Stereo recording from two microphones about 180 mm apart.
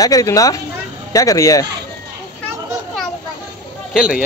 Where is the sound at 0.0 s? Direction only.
20° left (ahead or behind).